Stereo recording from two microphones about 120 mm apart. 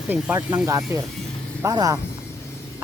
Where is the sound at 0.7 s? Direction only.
30° right (ahead or behind).